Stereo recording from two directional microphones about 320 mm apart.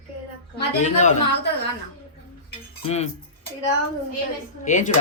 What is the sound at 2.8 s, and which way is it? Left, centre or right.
Speech, centre.